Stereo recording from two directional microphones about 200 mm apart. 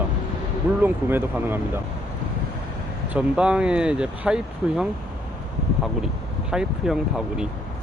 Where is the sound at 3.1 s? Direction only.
5° right (ahead or behind).